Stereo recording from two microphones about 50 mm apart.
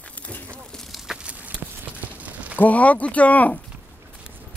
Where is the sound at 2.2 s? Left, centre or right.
Right.